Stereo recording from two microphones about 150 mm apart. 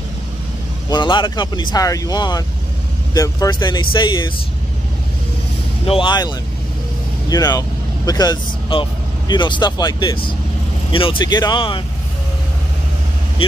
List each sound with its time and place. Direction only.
0.8 s speech: 30° left (ahead or behind)
5.9 s speech: 35° left (ahead or behind)